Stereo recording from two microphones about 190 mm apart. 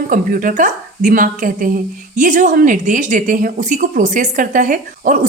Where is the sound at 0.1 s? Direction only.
45° right (ahead or behind).